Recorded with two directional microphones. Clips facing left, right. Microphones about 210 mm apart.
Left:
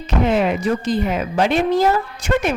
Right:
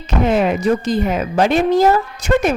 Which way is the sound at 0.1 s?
45° right (ahead or behind).